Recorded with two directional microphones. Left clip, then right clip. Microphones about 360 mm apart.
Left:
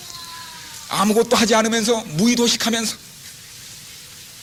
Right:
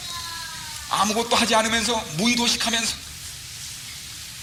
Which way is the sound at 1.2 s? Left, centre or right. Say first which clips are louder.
Left 3 dB; left.